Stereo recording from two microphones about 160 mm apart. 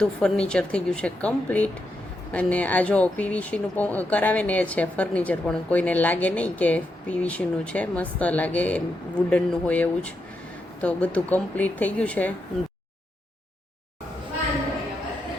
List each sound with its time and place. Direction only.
0.0 s speech: 5° left (ahead or behind)